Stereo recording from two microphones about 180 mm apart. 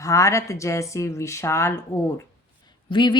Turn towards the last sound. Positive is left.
turn(degrees=25)  # may be behind; listen again after turning